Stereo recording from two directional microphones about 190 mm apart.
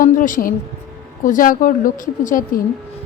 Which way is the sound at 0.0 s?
45° left (ahead or behind).